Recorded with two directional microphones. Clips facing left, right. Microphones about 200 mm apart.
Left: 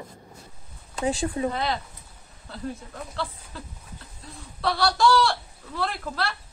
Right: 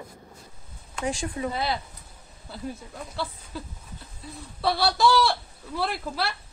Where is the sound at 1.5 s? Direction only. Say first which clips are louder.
Left 1 dB; 10° right (ahead or behind).